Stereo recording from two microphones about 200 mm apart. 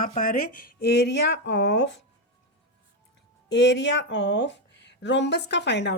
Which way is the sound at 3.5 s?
60° left (ahead or behind).